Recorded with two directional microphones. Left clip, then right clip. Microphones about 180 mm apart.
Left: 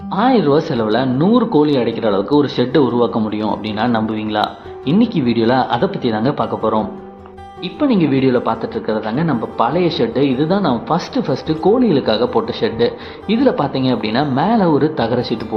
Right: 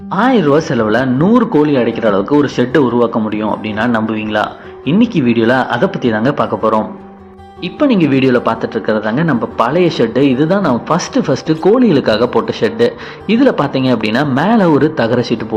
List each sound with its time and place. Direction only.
0.1 s speech: 15° right (ahead or behind)